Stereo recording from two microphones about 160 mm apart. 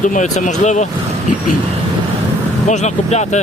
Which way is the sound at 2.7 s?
45° left (ahead or behind).